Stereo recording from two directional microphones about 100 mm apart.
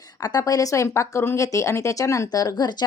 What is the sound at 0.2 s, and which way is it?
Speech, 40° left (ahead or behind).